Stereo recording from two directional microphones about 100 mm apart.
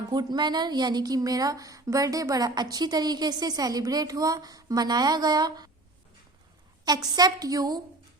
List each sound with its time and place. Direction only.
0.1 s a woman's voice: 45° right (ahead or behind)
6.8 s a woman's voice: 40° right (ahead or behind)